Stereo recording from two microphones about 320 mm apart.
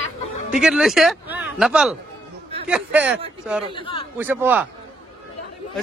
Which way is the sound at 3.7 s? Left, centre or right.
Centre.